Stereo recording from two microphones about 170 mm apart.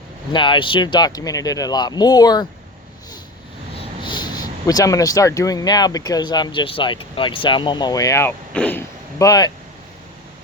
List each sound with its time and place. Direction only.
0.3 s speech: 30° left (ahead or behind)
4.0 s speech: 25° left (ahead or behind)